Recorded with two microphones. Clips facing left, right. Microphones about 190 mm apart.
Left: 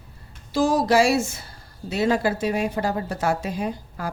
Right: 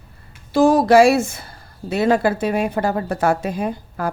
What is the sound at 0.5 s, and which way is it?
Speech, 60° right (ahead or behind).